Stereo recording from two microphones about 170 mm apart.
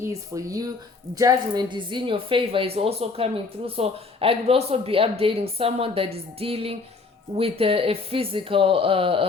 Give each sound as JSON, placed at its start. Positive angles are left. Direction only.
{"t": 0.0, "sound": "a woman's voice", "side_deg": -20}